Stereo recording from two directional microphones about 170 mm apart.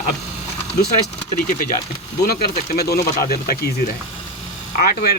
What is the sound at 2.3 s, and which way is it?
Speech, 65° left (ahead or behind).